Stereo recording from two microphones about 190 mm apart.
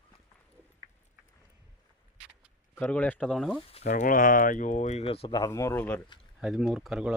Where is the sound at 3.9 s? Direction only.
40° left (ahead or behind); by 6.0 s 10° left (ahead or behind).